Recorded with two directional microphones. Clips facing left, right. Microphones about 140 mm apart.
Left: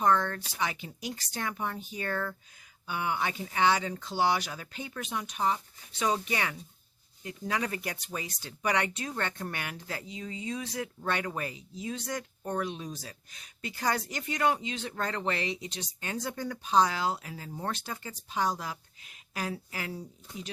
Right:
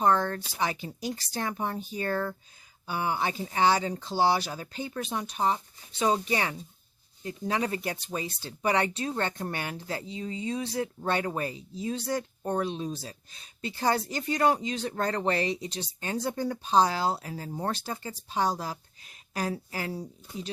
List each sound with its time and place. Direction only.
0.0 s speech: 35° right (ahead or behind)